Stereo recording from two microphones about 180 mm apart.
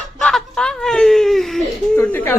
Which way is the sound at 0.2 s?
5° left (ahead or behind).